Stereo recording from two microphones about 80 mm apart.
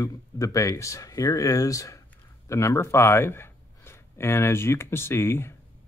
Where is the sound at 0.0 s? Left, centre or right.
Left.